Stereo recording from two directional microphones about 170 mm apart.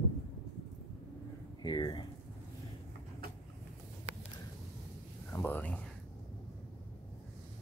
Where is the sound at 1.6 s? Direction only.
25° left (ahead or behind).